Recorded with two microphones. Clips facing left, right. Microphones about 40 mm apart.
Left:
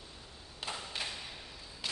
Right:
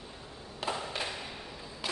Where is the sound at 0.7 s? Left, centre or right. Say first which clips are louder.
Right 5 dB; right.